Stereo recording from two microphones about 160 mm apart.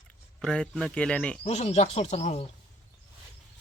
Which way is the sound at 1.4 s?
40° left (ahead or behind).